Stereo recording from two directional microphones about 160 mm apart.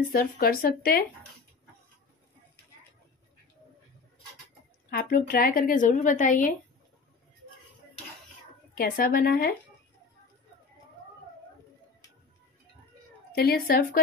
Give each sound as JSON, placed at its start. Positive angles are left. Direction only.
{"t": 0.0, "sound": "speech", "side_deg": 65}
{"t": 4.9, "sound": "speech", "side_deg": 65}
{"t": 8.7, "sound": "speech", "side_deg": 65}
{"t": 13.3, "sound": "speech", "side_deg": 75}